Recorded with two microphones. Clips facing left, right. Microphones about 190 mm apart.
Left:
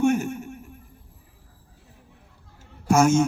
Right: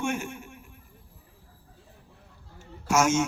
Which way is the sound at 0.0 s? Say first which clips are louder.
Left 9 dB; 40° left (ahead or behind).